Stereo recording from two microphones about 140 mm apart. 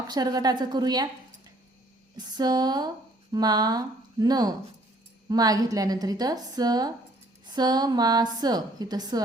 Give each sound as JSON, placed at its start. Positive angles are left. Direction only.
{"t": 0.1, "sound": "a woman's voice", "side_deg": -30}
{"t": 2.1, "sound": "a woman's voice", "side_deg": -30}